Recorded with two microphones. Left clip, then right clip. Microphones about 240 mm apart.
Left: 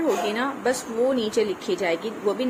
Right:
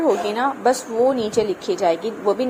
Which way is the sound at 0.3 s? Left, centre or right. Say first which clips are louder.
Right 6 dB; centre.